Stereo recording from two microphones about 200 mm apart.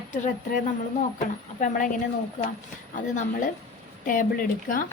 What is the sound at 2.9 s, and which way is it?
Speech, 40° left (ahead or behind).